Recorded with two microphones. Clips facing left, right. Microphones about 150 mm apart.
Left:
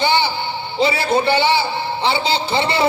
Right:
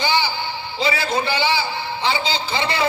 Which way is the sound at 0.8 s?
30° left (ahead or behind).